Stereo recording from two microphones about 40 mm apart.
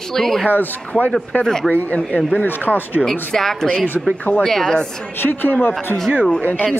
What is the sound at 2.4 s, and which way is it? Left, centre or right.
Speech, left.